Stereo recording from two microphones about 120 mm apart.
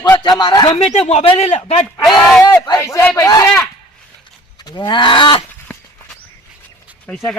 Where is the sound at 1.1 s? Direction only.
65° left (ahead or behind).